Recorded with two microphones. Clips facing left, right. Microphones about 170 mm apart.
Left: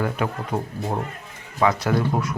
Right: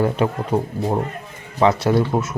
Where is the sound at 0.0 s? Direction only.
25° right (ahead or behind).